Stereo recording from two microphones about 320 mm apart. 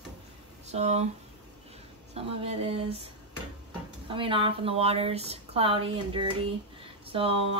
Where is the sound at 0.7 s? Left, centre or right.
Right.